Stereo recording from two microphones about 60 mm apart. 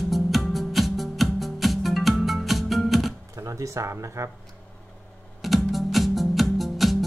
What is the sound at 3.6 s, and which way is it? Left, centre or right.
Speech, right.